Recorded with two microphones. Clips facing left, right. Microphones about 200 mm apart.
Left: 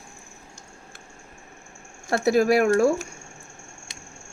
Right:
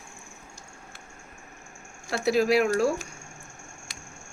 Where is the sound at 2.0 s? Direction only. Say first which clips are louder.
Left 4 dB; 50° left (ahead or behind).